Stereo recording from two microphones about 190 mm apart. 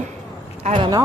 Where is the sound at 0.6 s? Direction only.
30° right (ahead or behind).